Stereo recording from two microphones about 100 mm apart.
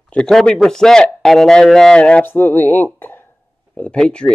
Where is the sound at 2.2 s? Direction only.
20° left (ahead or behind).